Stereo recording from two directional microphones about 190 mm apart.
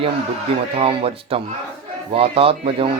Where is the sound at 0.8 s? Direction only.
30° right (ahead or behind).